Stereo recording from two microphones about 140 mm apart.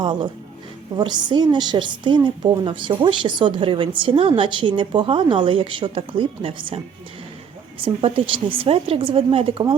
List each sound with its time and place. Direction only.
0.0 s a woman's voice: 35° right (ahead or behind)